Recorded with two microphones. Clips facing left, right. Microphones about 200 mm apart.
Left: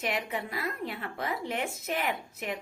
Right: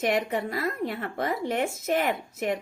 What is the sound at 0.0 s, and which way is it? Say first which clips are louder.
Speech: right 7 dB; 45° right (ahead or behind).